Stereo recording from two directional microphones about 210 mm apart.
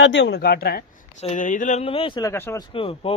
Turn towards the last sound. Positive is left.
turn(degrees=25)  # may be behind; listen again after turning